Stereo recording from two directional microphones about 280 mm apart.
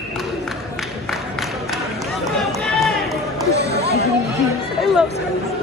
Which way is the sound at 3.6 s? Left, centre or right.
Right.